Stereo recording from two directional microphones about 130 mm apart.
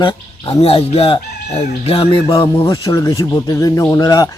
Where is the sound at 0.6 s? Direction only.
50° left (ahead or behind); by 4.3 s 25° left (ahead or behind).